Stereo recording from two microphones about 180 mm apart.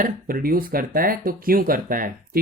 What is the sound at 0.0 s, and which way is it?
Speech, 55° right (ahead or behind).